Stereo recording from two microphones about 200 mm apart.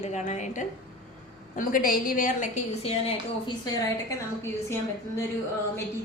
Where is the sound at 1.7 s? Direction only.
45° left (ahead or behind).